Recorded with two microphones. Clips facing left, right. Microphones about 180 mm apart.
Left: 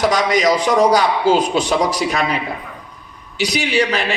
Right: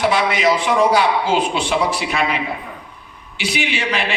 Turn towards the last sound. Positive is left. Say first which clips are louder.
# left 4 dB
turn(degrees=40)  # may be behind; listen again after turning